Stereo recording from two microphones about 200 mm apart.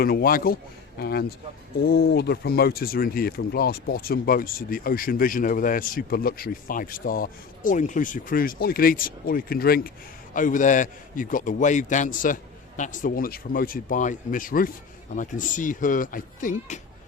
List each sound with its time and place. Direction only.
0.0 s a man's voice: 50° left (ahead or behind)